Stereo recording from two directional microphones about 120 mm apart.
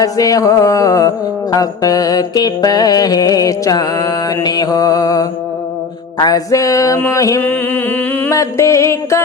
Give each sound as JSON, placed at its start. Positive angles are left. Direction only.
{"t": 0.0, "sound": "music", "side_deg": 30}
{"t": 7.4, "sound": "music", "side_deg": 15}